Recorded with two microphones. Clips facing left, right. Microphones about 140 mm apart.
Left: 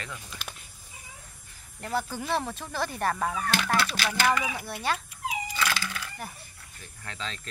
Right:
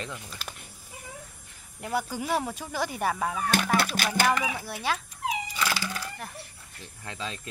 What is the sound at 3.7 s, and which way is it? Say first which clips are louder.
Music: right 2 dB; 45° right (ahead or behind).